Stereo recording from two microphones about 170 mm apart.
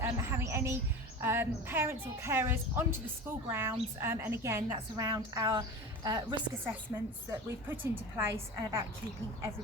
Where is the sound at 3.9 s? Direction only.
15° right (ahead or behind).